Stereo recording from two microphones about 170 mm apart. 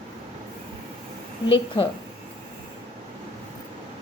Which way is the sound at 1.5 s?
30° left (ahead or behind).